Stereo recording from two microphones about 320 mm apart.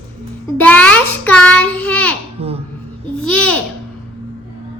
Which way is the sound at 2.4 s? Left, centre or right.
Centre.